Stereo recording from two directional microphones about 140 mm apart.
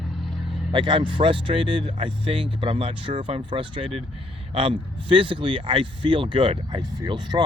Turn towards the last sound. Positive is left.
turn(degrees=-30)  # may be behind; listen again after turning